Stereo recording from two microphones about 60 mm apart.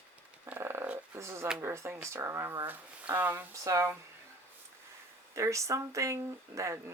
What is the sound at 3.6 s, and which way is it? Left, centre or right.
Speech, right.